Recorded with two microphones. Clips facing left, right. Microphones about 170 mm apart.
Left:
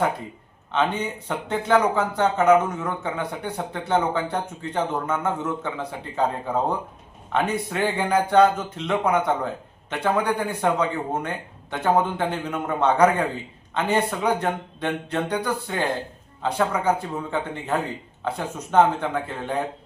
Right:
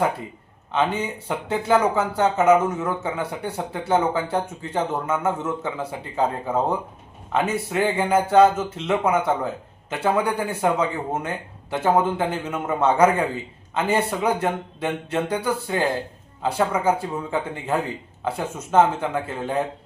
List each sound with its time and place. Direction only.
0.7 s speech: 10° right (ahead or behind)
18.3 s speech: 5° right (ahead or behind)